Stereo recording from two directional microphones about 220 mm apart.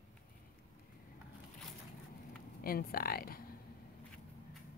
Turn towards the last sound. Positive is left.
turn(degrees=45)  # may be behind; listen again after turning